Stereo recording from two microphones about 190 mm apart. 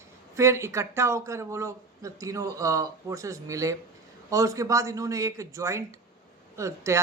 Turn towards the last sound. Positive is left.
turn(degrees=-15)  # may be behind; listen again after turning